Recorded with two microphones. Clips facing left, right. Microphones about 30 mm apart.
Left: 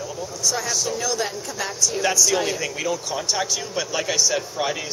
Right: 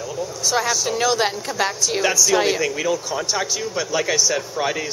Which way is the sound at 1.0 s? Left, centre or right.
Right.